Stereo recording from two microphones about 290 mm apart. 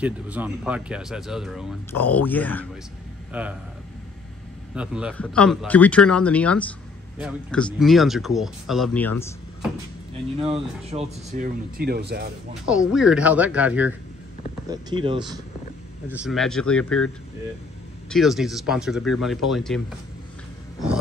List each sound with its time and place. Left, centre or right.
0.0 s speech: centre
3.3 s speech: centre
4.7 s speech: centre
10.4 s speech: right
12.6 s speech: centre
14.7 s speech: centre
16.1 s speech: centre
18.1 s speech: centre